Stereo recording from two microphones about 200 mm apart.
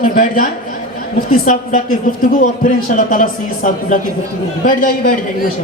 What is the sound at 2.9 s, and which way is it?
A man's voice, 40° left (ahead or behind).